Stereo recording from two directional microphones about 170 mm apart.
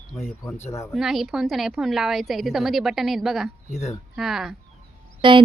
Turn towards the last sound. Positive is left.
turn(degrees=-30)  # may be behind; listen again after turning